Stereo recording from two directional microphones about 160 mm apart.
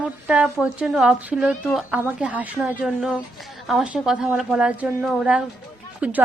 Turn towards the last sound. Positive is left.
turn(degrees=-10)  # may be behind; listen again after turning